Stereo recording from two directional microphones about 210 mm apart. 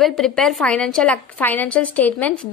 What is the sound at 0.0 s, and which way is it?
A woman's voice, centre (ahead or behind).